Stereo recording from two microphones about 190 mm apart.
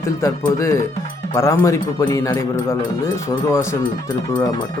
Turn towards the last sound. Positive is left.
turn(degrees=15)  # may be behind; listen again after turning